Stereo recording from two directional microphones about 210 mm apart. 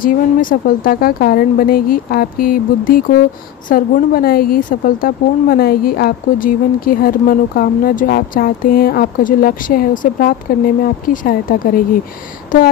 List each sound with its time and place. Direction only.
0.0 s a woman's voice: 40° left (ahead or behind)